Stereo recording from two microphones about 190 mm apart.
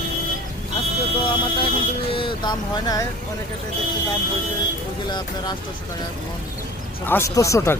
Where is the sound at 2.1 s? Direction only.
25° left (ahead or behind).